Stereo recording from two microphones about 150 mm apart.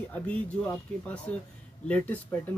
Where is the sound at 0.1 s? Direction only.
10° left (ahead or behind).